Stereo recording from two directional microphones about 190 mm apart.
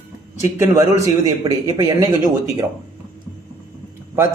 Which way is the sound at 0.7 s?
15° right (ahead or behind).